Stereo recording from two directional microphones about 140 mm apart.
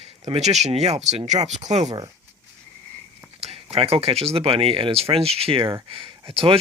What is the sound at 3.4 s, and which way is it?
Speech, 50° right (ahead or behind).